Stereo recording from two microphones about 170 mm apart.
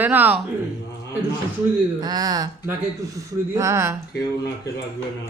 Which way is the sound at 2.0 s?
25° right (ahead or behind).